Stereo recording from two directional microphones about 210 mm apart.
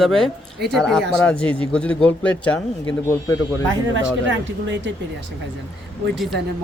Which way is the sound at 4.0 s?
60° right (ahead or behind).